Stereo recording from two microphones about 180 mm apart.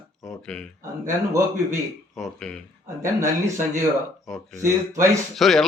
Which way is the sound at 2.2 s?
5° left (ahead or behind).